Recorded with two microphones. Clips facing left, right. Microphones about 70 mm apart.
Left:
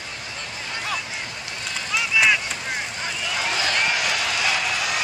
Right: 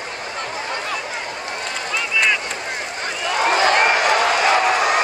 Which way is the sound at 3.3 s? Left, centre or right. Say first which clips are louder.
Right 10 dB; right.